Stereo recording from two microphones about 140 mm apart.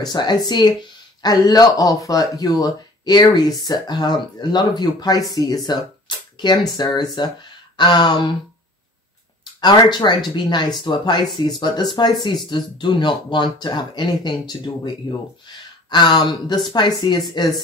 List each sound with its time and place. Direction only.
0.0 s speech: 30° left (ahead or behind)
5.7 s a sound: 30° left (ahead or behind)
6.8 s speech: 30° left (ahead or behind)
9.6 s speech: 30° left (ahead or behind)